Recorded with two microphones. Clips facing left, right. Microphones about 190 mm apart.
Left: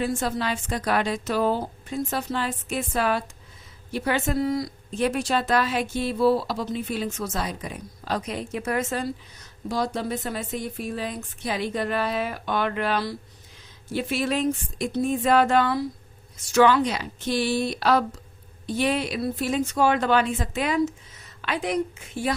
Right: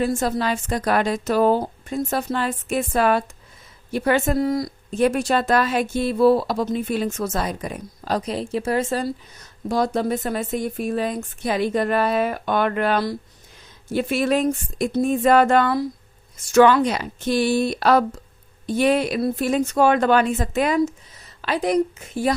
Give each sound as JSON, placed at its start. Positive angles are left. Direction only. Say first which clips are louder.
{"t": 0.0, "sound": "speech", "louder": "right 4 dB", "side_deg": -40}
{"t": 9.6, "sound": "a woman's voice", "louder": "right 6 dB", "side_deg": -50}